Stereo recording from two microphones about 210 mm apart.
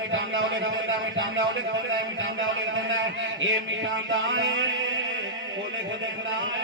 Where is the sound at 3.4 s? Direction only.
65° right (ahead or behind).